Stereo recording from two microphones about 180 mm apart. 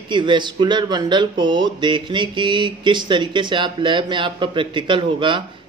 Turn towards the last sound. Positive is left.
turn(degrees=-25)  # may be behind; listen again after turning